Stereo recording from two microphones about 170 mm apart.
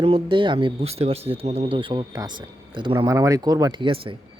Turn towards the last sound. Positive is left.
turn(degrees=-30)  # may be behind; listen again after turning